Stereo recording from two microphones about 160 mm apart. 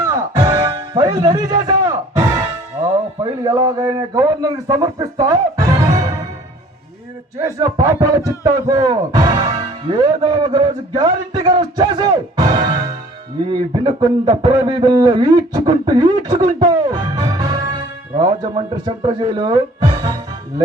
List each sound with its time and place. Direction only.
0.0 s music: 20° right (ahead or behind)
3.4 s speech: 20° right (ahead or behind)
7.4 s speech: 20° right (ahead or behind)